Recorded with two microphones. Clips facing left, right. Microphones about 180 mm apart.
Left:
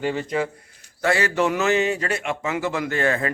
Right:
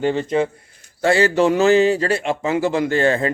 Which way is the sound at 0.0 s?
25° right (ahead or behind).